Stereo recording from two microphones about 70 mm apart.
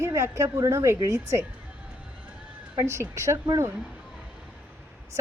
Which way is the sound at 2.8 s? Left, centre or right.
Right.